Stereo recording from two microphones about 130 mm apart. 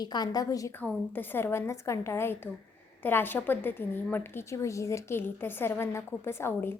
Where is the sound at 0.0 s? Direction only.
30° left (ahead or behind).